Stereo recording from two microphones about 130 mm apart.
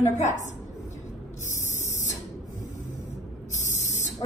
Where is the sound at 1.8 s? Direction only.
65° left (ahead or behind).